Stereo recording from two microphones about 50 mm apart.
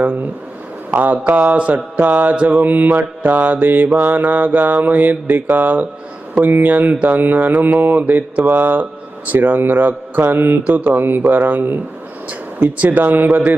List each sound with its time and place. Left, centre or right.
0.9 s mantra: right
1.5 s mantra: right
2.0 s mantra: right
10.7 s mantra: right
12.5 s speech: right
13.0 s mantra: right